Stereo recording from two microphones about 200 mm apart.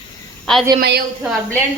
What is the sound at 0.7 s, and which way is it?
Speech, 55° right (ahead or behind).